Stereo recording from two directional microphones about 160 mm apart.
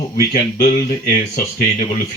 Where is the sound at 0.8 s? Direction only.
55° left (ahead or behind).